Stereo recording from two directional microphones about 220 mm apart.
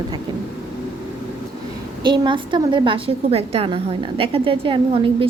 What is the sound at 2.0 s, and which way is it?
A woman's voice, 20° right (ahead or behind).